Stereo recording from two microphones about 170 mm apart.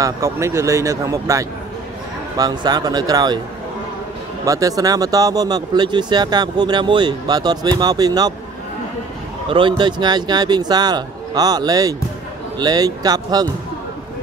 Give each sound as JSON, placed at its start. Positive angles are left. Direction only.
{"t": 0.0, "sound": "speech", "side_deg": -15}
{"t": 4.5, "sound": "speech", "side_deg": -20}
{"t": 9.5, "sound": "speech", "side_deg": -30}